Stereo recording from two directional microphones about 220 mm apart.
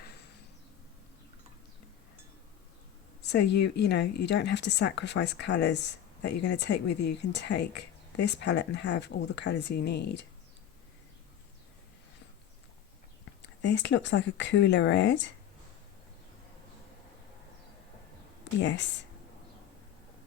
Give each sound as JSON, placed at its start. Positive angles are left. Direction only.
{"t": 3.2, "sound": "a woman's voice", "side_deg": 50}
{"t": 13.4, "sound": "a woman's voice", "side_deg": 55}
{"t": 18.6, "sound": "a woman's voice", "side_deg": 55}